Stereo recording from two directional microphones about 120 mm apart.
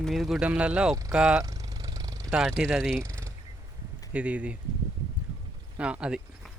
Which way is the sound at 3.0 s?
25° right (ahead or behind).